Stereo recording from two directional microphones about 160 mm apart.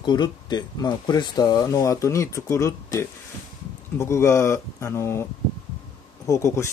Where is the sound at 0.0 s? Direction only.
25° left (ahead or behind).